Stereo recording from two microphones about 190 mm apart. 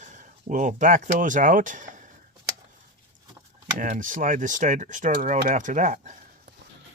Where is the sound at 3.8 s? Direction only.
45° right (ahead or behind).